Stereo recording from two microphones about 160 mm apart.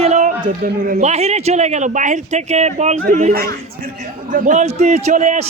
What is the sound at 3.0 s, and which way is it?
A man's voice, 60° right (ahead or behind).